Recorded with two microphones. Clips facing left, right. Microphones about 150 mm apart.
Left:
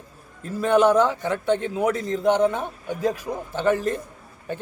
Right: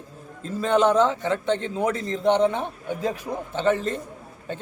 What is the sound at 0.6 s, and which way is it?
Speech, 10° left (ahead or behind).